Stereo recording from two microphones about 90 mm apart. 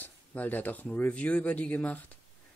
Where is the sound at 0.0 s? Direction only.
20° left (ahead or behind).